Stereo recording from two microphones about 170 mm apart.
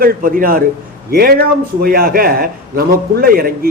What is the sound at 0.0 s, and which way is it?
A man's voice, 55° right (ahead or behind).